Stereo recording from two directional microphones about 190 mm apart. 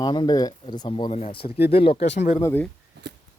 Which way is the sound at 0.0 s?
25° left (ahead or behind).